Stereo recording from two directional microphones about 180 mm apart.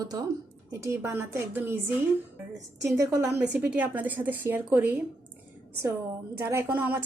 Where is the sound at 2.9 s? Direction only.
20° right (ahead or behind).